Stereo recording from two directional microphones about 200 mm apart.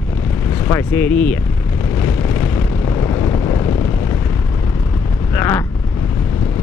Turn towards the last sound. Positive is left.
turn(degrees=10)  # may be behind; listen again after turning